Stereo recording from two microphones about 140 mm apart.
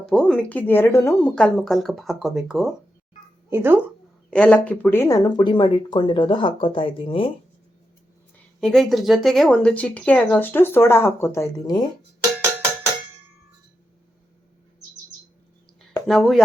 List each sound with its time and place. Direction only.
0.1 s speech: 5° left (ahead or behind)
1.4 s speech: 5° left (ahead or behind)
3.5 s speech: 15° right (ahead or behind)
4.3 s speech: 5° left (ahead or behind); by 7.3 s 40° left (ahead or behind)
8.6 s speech: centre (ahead or behind); by 11.9 s 30° left (ahead or behind)
16.0 s speech: centre (ahead or behind)